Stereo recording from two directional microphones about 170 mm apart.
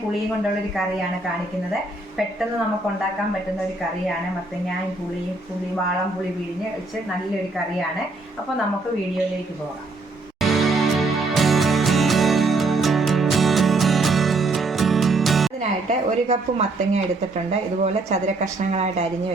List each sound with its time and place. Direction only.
10.4 s music: centre (ahead or behind)
15.9 s speech: 40° right (ahead or behind)